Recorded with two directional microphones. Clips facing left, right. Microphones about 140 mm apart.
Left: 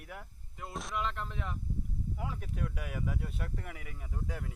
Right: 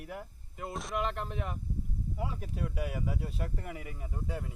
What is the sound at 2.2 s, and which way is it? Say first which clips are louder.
Speech: right 3 dB; 35° right (ahead or behind).